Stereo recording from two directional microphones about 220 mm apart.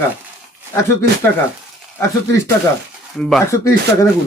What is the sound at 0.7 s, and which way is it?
Speech, 10° left (ahead or behind).